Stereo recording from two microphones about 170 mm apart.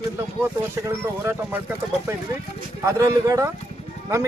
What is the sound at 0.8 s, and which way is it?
Speech, 15° right (ahead or behind).